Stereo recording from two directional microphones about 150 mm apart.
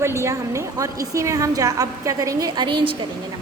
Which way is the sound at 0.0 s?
20° right (ahead or behind).